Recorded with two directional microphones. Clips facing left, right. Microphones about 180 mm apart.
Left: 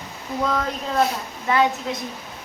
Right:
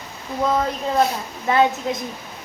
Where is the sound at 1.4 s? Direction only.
25° right (ahead or behind).